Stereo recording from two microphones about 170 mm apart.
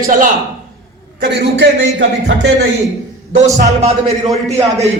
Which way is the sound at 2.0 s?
90° right.